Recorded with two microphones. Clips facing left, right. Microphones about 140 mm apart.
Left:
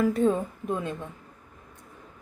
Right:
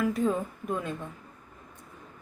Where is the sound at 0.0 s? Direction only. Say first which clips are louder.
Left 4 dB; 30° left (ahead or behind).